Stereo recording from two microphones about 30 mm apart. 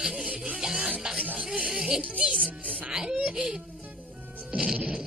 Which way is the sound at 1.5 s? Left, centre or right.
Right.